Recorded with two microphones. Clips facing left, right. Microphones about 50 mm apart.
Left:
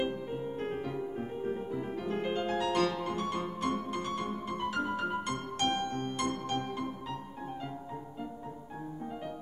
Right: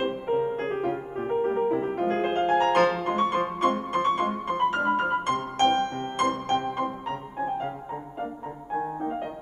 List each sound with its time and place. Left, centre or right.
0.0 s music: right